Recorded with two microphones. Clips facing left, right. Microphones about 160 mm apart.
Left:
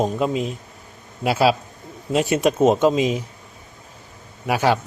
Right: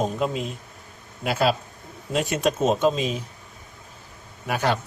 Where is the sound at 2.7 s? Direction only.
65° left (ahead or behind).